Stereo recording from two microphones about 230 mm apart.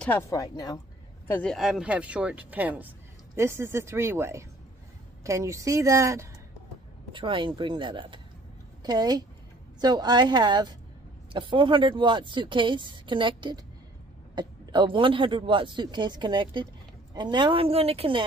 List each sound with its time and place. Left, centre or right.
0.0 s speech: centre; by 18.2 s right